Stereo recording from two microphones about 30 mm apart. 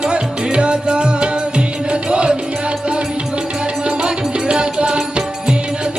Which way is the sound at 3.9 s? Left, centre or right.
Right.